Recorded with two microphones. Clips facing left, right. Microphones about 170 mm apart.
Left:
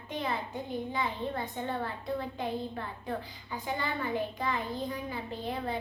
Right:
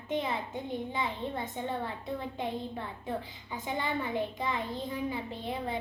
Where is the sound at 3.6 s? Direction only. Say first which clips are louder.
Right 1 dB; 20° right (ahead or behind).